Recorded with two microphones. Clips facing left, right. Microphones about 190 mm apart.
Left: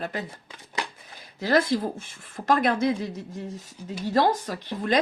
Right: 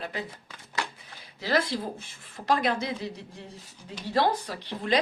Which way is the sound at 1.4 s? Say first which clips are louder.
Left 5 dB; 50° left (ahead or behind).